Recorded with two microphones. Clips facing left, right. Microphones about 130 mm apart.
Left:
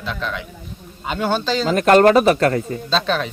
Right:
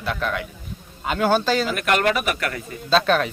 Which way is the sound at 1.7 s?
35° left (ahead or behind).